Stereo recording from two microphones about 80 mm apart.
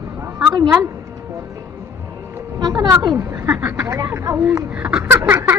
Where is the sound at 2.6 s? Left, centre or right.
Right.